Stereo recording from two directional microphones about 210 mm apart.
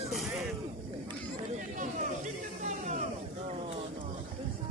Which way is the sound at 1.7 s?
35° right (ahead or behind).